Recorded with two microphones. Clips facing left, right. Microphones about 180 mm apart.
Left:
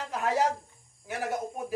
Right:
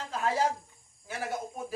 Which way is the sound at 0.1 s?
15° left (ahead or behind).